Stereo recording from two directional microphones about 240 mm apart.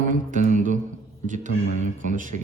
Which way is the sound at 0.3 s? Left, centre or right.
Right.